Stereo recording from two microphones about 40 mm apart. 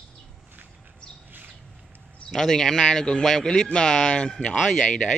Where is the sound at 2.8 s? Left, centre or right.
Left.